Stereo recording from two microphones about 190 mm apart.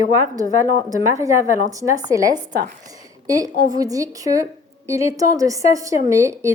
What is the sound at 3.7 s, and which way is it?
A woman's voice, 20° right (ahead or behind).